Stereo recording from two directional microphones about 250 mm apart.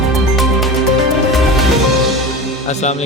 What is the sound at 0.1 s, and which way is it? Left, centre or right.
Music, centre.